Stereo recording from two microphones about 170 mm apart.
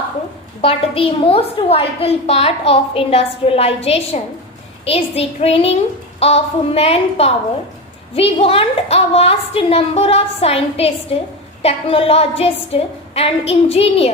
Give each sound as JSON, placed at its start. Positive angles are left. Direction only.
{"t": 0.6, "sound": "a woman's voice", "side_deg": 35}